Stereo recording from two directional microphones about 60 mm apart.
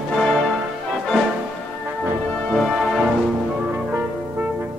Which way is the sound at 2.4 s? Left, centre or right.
Centre.